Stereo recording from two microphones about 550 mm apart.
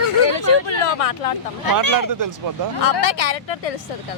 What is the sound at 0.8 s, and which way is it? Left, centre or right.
Speech, left.